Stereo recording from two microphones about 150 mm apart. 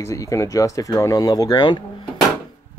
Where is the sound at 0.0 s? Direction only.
20° left (ahead or behind).